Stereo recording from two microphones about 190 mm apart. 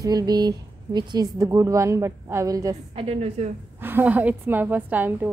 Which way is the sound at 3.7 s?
10° right (ahead or behind).